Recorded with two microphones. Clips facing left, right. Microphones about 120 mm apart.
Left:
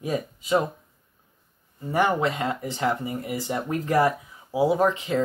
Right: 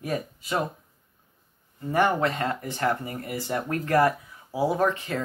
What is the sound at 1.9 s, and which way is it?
Speech, 15° left (ahead or behind).